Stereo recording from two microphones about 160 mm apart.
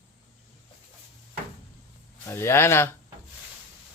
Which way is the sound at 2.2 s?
15° left (ahead or behind).